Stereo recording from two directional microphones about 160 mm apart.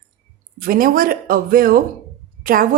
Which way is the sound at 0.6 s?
65° right (ahead or behind).